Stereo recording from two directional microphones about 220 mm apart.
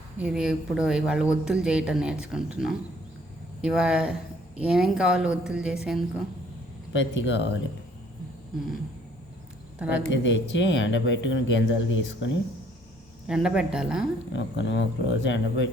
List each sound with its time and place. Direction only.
0.2 s speech: 5° right (ahead or behind)
6.9 s speech: 55° left (ahead or behind)
9.7 s speech: 5° right (ahead or behind)
10.1 s speech: 55° left (ahead or behind)
13.2 s speech: 5° right (ahead or behind)
14.3 s speech: 55° left (ahead or behind)